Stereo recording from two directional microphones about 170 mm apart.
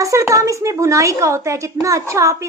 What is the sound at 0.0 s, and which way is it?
A woman's voice, 20° right (ahead or behind).